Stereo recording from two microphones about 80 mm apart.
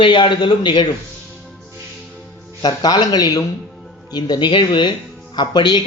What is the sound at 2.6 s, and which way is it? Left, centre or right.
Speech, left.